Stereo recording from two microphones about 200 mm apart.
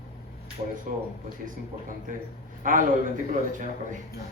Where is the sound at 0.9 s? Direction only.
45° right (ahead or behind).